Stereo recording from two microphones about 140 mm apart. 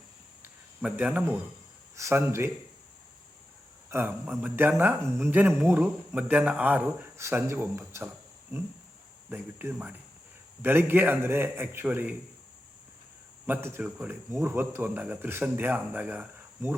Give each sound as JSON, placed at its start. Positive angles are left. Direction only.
{"t": 0.4, "sound": "a sound", "side_deg": -10}
{"t": 2.0, "sound": "speech", "side_deg": -20}
{"t": 3.8, "sound": "a man's voice", "side_deg": -15}
{"t": 9.3, "sound": "a man's voice", "side_deg": -15}
{"t": 13.5, "sound": "a man's voice", "side_deg": -15}